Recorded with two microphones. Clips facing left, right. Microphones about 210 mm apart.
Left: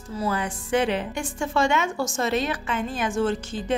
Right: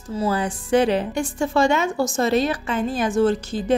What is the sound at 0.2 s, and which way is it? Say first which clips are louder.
A woman's voice: right 4 dB; 35° right (ahead or behind).